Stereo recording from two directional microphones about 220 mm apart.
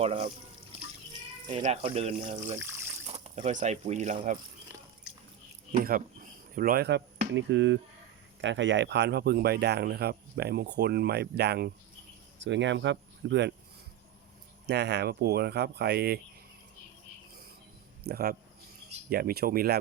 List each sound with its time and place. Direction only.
0.0 s speech: 30° right (ahead or behind)
1.5 s speech: 25° right (ahead or behind)
5.7 s speech: 40° right (ahead or behind)
14.7 s speech: 50° right (ahead or behind)
18.0 s speech: 45° right (ahead or behind)